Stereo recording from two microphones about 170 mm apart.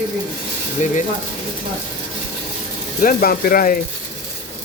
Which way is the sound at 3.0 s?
60° left (ahead or behind).